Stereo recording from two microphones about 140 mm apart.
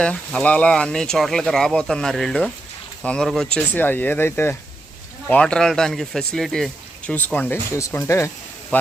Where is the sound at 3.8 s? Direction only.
15° left (ahead or behind).